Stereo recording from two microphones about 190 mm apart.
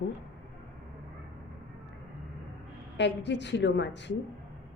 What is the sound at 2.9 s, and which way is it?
A woman's voice, 70° left (ahead or behind).